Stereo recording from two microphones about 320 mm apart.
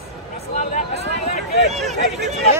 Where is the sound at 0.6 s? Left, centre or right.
Left.